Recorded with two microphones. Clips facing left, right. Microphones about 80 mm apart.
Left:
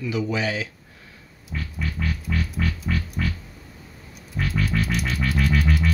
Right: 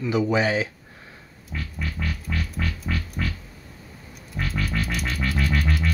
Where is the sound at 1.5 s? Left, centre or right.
Centre.